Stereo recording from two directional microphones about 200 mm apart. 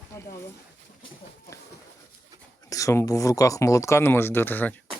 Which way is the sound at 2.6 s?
15° left (ahead or behind).